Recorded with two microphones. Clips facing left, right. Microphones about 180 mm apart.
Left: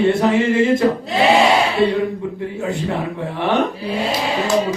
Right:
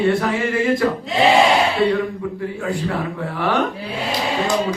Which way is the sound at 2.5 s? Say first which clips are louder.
Left 2 dB; 20° left (ahead or behind).